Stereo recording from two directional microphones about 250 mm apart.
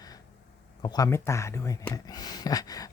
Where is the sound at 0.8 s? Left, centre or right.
Centre.